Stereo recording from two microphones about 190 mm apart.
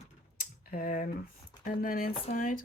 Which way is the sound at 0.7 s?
50° left (ahead or behind).